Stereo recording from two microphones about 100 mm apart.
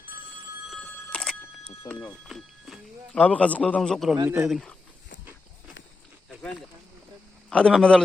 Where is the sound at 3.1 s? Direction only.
15° left (ahead or behind).